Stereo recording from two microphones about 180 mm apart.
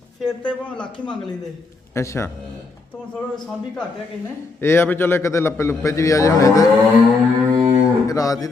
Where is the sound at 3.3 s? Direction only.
5° left (ahead or behind).